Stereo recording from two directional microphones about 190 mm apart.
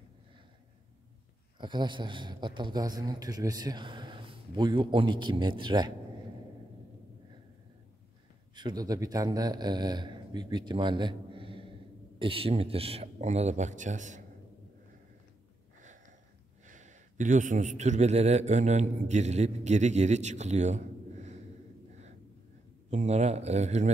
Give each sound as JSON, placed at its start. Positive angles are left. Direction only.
{"t": 1.6, "sound": "speech", "side_deg": -25}
{"t": 8.5, "sound": "speech", "side_deg": -20}
{"t": 16.6, "sound": "a man's voice", "side_deg": -40}
{"t": 22.8, "sound": "speech", "side_deg": -35}